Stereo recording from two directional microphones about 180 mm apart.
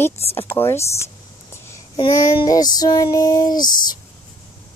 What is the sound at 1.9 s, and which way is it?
Female singing, 20° left (ahead or behind).